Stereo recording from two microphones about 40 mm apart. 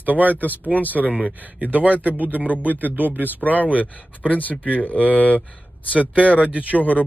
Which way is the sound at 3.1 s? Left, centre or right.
Right.